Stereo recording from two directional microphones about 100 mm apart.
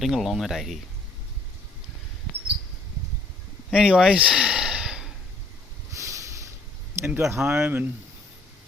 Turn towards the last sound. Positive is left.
turn(degrees=-20)  # may be behind; listen again after turning